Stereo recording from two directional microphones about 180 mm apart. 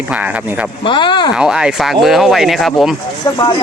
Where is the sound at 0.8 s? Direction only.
25° left (ahead or behind).